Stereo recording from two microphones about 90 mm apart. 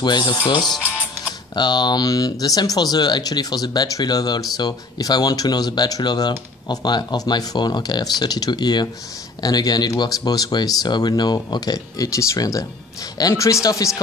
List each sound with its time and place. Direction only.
0.0 s speech: 55° left (ahead or behind)
0.6 s speech: 5° left (ahead or behind)
1.5 s speech: 55° left (ahead or behind); by 13.8 s 40° left (ahead or behind)